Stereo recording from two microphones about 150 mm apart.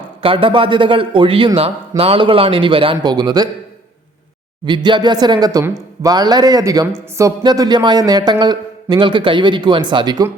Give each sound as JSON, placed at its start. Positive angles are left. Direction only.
{"t": 0.2, "sound": "a man's voice", "side_deg": -35}
{"t": 4.6, "sound": "speech", "side_deg": -30}